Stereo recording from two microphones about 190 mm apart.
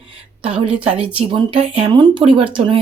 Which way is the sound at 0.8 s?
30° right (ahead or behind).